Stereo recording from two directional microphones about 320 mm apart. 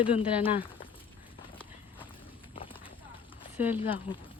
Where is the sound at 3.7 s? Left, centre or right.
Centre.